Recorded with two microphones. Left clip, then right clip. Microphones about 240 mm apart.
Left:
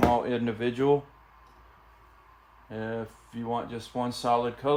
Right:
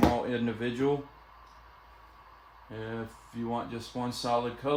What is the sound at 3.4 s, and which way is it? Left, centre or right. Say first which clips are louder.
Speech: left 3 dB; left.